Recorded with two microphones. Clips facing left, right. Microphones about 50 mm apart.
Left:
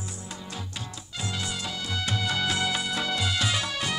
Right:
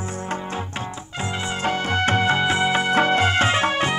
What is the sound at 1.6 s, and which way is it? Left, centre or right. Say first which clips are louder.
Music: right 11 dB; right.